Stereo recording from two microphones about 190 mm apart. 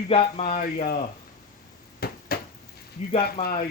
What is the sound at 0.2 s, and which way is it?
Speech, 45° left (ahead or behind).